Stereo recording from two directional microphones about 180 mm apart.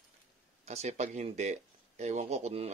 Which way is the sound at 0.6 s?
40° right (ahead or behind).